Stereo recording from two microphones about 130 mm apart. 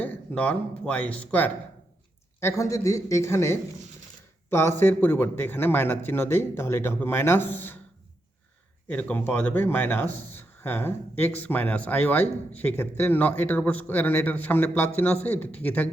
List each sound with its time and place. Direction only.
0.0 s speech: 10° left (ahead or behind)
2.4 s speech: 25° left (ahead or behind)
8.9 s speech: 15° left (ahead or behind)